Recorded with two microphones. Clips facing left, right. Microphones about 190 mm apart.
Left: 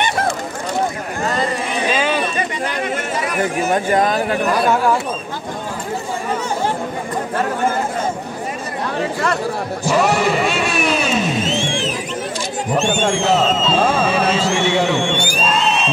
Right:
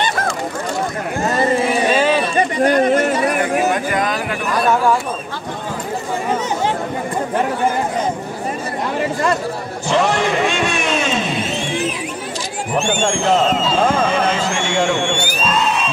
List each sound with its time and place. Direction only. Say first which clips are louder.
1.7 s a sound: right 4 dB; centre (ahead or behind)
2.3 s chatter: right 8 dB; 45° right (ahead or behind)
3.7 s speech: left 3 dB; 30° left (ahead or behind)
9.8 s speech: even; 5° left (ahead or behind)
11.4 s music: left 1 dB; 25° left (ahead or behind)
12.7 s speech: even; 15° right (ahead or behind)
13.9 s speech: even; 5° left (ahead or behind)